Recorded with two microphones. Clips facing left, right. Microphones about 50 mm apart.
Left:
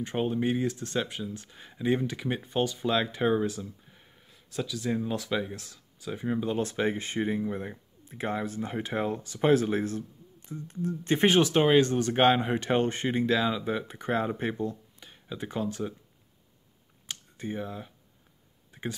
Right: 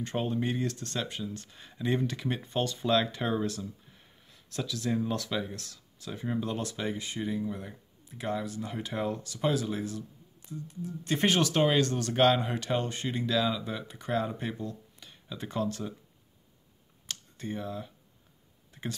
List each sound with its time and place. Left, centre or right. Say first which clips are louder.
0.0 s speech: left 3 dB; centre
6.6 s speech: left 5 dB; left
11.1 s speech: left 4 dB; left
17.0 s a sound: left 2 dB; centre